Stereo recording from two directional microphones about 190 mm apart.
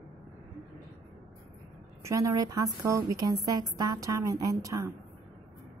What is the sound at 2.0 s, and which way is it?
A woman's voice, 15° right (ahead or behind).